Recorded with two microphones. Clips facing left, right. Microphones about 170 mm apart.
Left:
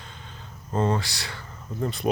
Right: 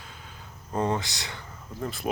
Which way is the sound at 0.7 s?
15° right (ahead or behind).